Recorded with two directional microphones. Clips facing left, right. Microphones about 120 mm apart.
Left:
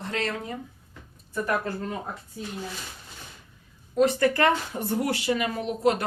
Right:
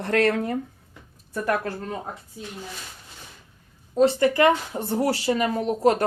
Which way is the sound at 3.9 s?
30° right (ahead or behind).